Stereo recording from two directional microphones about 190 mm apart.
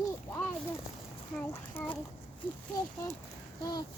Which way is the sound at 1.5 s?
10° left (ahead or behind).